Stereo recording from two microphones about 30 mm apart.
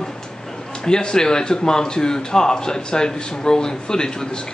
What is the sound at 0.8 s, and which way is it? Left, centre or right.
A man's voice, left.